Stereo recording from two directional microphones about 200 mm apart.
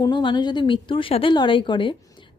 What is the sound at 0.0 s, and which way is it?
A woman's voice, 20° left (ahead or behind).